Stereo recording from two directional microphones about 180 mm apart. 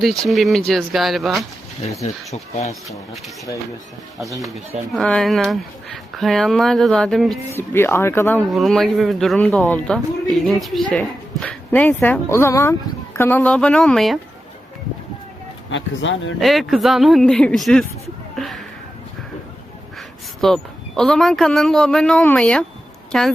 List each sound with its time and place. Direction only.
0.0 s speech: centre (ahead or behind)
2.0 s speech: 35° left (ahead or behind)
4.9 s speech: 5° left (ahead or behind)
7.5 s speech: 15° left (ahead or behind)
8.4 s speech: centre (ahead or behind)
15.7 s speech: 90° left
16.4 s speech: centre (ahead or behind)
18.3 s a sound: centre (ahead or behind)
20.4 s speech: 5° left (ahead or behind)